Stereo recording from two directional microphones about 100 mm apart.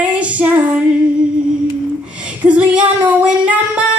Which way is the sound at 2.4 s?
15° right (ahead or behind).